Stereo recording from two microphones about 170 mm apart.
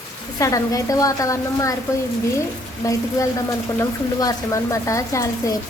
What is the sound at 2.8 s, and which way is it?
Speech, 20° left (ahead or behind).